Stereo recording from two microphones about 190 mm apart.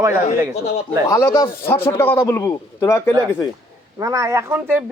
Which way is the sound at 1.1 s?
15° left (ahead or behind).